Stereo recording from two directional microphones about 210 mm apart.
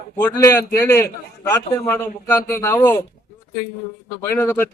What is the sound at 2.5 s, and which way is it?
Speech, 10° left (ahead or behind).